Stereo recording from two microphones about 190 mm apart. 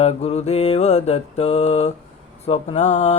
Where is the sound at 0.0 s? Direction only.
35° left (ahead or behind).